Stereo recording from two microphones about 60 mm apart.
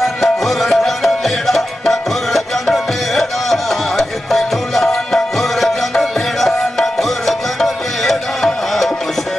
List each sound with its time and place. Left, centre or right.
0.0 s music: centre